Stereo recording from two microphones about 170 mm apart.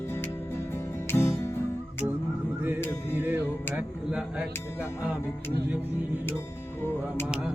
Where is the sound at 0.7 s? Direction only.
15° left (ahead or behind).